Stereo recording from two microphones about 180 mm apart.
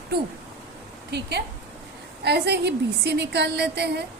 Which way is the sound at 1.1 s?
70° right (ahead or behind).